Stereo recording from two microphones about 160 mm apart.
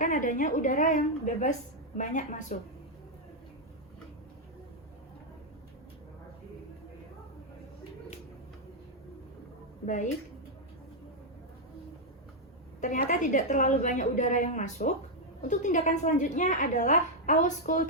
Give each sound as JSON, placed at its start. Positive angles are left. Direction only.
{"t": 0.0, "sound": "a woman's voice", "side_deg": 55}
{"t": 9.8, "sound": "a woman's voice", "side_deg": 50}
{"t": 12.8, "sound": "a woman's voice", "side_deg": 50}